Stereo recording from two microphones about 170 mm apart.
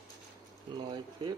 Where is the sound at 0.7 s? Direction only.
25° right (ahead or behind).